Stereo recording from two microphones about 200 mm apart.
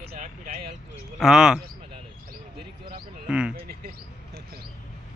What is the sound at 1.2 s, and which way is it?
Speech, 5° right (ahead or behind).